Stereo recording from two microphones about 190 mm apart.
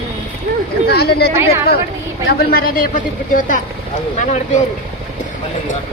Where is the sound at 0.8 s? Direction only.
55° left (ahead or behind).